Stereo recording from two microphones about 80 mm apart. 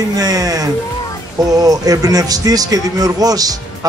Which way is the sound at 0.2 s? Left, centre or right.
Right.